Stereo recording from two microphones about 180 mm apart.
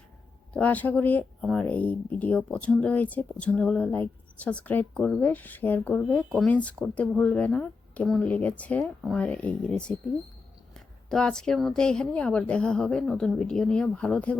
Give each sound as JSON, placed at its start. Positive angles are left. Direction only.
{"t": 0.5, "sound": "a woman's voice", "side_deg": 10}